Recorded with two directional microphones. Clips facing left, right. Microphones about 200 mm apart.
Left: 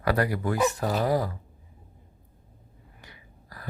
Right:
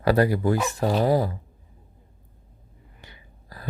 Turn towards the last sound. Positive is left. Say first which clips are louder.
# right 2 dB
turn(degrees=-25)  # may be behind; listen again after turning